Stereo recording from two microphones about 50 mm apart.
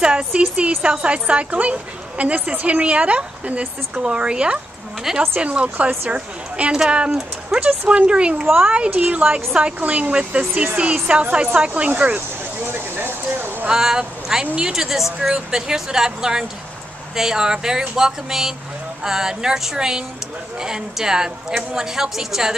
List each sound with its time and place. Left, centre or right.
0.0 s a woman's voice: centre
12.5 s a sound: right
13.7 s speech: centre
14.4 s a woman's voice: right
14.7 s a woman's voice: centre